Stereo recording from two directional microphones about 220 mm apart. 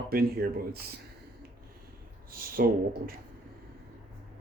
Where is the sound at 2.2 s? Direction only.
40° right (ahead or behind).